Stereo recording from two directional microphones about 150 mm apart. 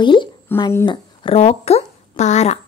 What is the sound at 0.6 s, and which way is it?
Speech, 20° left (ahead or behind).